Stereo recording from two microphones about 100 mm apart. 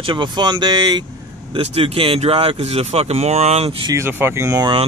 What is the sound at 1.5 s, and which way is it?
Speech, 70° right (ahead or behind).